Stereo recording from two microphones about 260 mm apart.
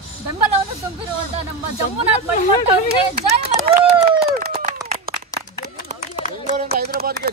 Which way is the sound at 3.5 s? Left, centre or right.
Centre.